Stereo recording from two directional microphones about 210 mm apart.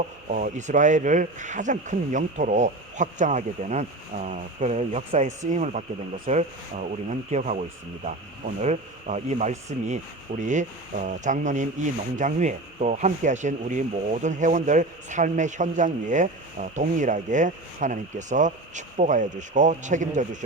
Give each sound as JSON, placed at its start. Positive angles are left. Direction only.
{"t": 0.3, "sound": "speech", "side_deg": -40}
{"t": 8.6, "sound": "speech", "side_deg": -35}